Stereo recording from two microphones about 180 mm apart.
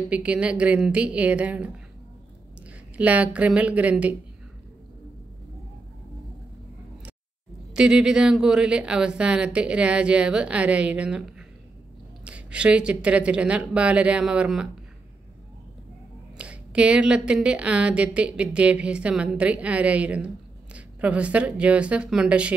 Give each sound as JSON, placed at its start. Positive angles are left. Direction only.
{"t": 0.1, "sound": "speech", "side_deg": -5}
{"t": 3.0, "sound": "speech", "side_deg": -5}
{"t": 7.7, "sound": "speech", "side_deg": -5}
{"t": 16.3, "sound": "speech", "side_deg": -5}